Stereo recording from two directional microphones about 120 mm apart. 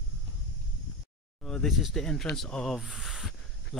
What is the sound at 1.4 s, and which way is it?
Speech, centre (ahead or behind).